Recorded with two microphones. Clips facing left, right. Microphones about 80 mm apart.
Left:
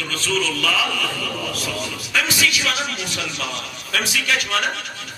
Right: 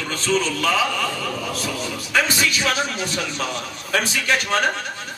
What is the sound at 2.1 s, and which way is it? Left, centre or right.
A man's voice, right.